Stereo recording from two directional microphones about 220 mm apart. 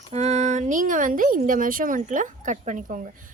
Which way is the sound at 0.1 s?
30° right (ahead or behind).